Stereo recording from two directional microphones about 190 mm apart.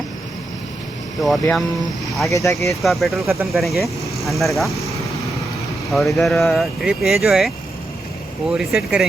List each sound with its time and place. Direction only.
1.2 s speech: centre (ahead or behind)
2.3 s speech: 15° left (ahead or behind)
2.8 s speech: centre (ahead or behind)
5.9 s speech: centre (ahead or behind)